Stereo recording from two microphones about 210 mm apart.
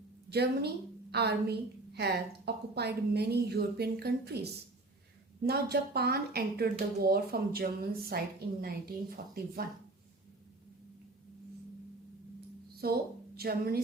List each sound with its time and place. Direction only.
0.3 s a woman's voice: 50° right (ahead or behind)
5.4 s a woman's voice: 50° right (ahead or behind)
12.8 s a woman's voice: 45° right (ahead or behind)